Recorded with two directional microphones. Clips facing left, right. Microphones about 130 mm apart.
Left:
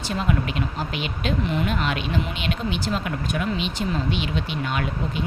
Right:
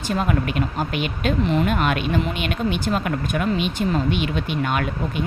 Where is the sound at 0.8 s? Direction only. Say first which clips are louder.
Right 4 dB; 50° right (ahead or behind).